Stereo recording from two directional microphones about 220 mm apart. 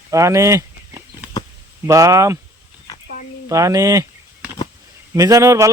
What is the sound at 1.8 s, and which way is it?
Speech, 15° right (ahead or behind).